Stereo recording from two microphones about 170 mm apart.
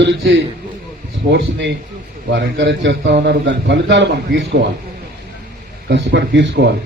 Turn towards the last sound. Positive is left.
turn(degrees=-85)